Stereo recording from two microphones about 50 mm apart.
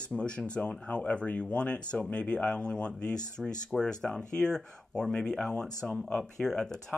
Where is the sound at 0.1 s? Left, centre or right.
Left.